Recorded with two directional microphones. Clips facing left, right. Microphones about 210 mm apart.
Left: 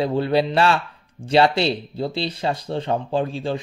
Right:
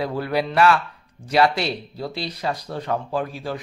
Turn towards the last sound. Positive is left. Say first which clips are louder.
# left 4 dB
turn(degrees=25)  # may be behind; listen again after turning